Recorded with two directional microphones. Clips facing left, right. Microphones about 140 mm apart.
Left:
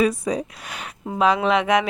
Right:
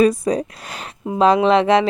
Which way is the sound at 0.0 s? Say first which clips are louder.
Right 5 dB; 40° right (ahead or behind).